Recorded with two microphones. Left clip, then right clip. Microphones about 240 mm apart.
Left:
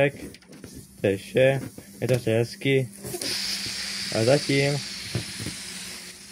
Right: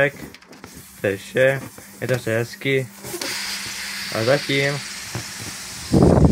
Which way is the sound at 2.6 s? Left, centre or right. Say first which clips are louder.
Right 2 dB; right.